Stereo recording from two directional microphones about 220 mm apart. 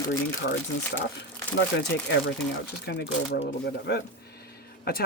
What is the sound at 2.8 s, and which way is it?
Speech, 50° left (ahead or behind).